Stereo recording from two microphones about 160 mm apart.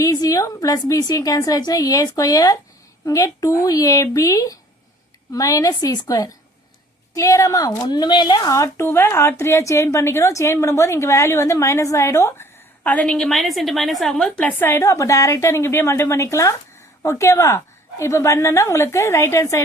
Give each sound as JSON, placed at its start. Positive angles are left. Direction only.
{"t": 0.0, "sound": "a woman's voice", "side_deg": 20}